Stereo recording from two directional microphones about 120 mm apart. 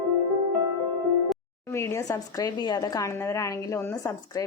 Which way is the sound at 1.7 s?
20° left (ahead or behind).